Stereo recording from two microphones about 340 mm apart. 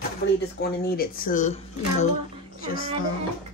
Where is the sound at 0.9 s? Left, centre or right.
Left.